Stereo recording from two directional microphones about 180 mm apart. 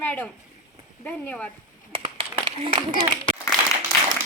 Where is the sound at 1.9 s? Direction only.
30° right (ahead or behind).